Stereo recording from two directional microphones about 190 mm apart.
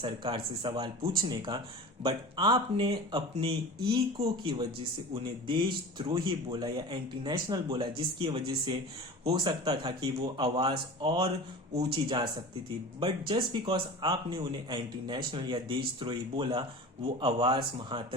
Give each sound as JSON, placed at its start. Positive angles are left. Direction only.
{"t": 0.0, "sound": "speech", "side_deg": -25}